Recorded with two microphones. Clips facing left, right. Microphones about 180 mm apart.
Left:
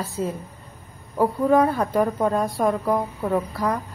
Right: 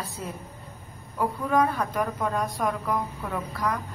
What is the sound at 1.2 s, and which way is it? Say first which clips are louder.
A woman's voice: left 6 dB; 30° left (ahead or behind).